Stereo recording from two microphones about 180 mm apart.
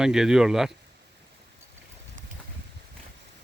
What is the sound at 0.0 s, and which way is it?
Speech, 5° right (ahead or behind).